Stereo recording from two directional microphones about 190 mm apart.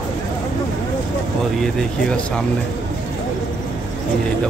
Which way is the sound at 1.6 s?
5° left (ahead or behind).